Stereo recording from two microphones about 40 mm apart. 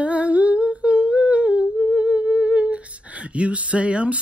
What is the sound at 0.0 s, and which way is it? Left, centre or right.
Humming, right.